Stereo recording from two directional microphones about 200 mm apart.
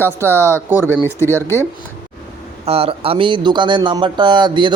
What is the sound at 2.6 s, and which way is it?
Speech, 30° right (ahead or behind).